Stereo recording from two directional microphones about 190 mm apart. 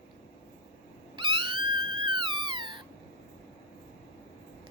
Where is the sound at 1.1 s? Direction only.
25° right (ahead or behind).